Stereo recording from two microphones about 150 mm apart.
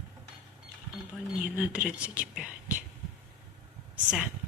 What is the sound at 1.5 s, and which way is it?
A woman's voice, 10° right (ahead or behind).